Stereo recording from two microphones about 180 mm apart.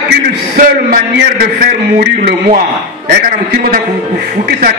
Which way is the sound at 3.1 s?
55° right (ahead or behind).